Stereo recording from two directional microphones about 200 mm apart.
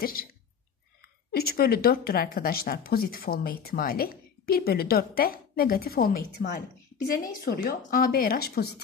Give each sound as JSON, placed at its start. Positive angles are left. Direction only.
{"t": 0.0, "sound": "a woman's voice", "side_deg": 45}
{"t": 1.3, "sound": "a woman's voice", "side_deg": 50}